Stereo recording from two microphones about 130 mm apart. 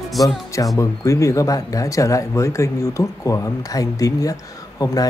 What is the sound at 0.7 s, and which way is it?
Speech, 25° left (ahead or behind).